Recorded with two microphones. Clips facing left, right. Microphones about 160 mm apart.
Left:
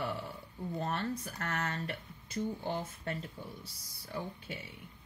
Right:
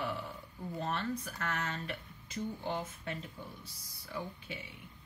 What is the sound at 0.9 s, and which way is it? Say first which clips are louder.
Speech: left 1 dB; 40° left (ahead or behind).